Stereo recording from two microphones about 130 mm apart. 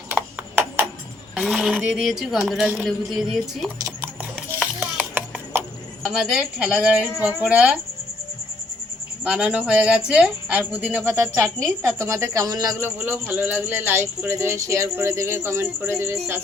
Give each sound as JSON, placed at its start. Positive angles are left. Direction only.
{"t": 0.1, "sound": "a sound", "side_deg": -15}
{"t": 1.4, "sound": "speech", "side_deg": -5}
{"t": 4.6, "sound": "music", "side_deg": -10}
{"t": 6.1, "sound": "speech", "side_deg": -5}
{"t": 9.2, "sound": "speech", "side_deg": -10}
{"t": 11.0, "sound": "speech", "side_deg": -20}
{"t": 13.1, "sound": "speech", "side_deg": -15}